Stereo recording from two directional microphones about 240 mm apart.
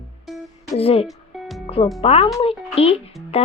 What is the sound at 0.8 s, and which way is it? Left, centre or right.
Speech, left.